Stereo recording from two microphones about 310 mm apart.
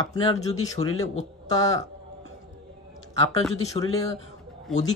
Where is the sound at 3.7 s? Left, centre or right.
Centre.